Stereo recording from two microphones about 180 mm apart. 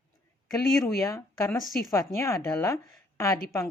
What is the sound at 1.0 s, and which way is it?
Speech, 15° left (ahead or behind).